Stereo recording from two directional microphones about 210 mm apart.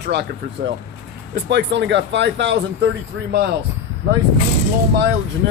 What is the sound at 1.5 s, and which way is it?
Speech, 55° right (ahead or behind).